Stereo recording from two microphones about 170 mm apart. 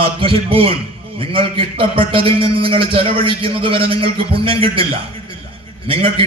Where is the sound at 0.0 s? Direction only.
30° right (ahead or behind).